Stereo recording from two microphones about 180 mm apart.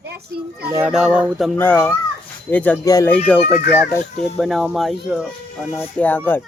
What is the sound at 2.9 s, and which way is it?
Speech, 20° left (ahead or behind).